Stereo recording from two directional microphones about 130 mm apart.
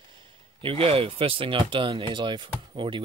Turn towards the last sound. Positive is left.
turn(degrees=-40)  # may be behind; listen again after turning